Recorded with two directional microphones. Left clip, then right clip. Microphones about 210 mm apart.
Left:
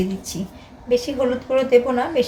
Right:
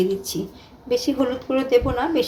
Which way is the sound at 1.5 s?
30° right (ahead or behind).